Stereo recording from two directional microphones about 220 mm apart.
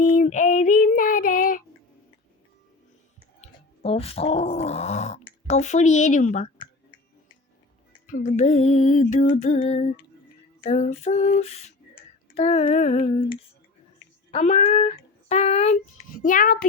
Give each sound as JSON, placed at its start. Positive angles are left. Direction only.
{"t": 0.0, "sound": "female singing", "side_deg": 35}
{"t": 3.4, "sound": "speech", "side_deg": 25}
{"t": 8.0, "sound": "music", "side_deg": 35}
{"t": 10.6, "sound": "a sound", "side_deg": 35}
{"t": 14.3, "sound": "speech", "side_deg": 30}
{"t": 14.7, "sound": "child singing", "side_deg": 25}